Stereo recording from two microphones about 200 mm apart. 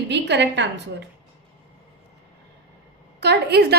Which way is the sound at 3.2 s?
55° right (ahead or behind).